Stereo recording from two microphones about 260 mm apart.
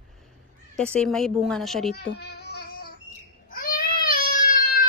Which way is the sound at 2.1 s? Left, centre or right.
Left.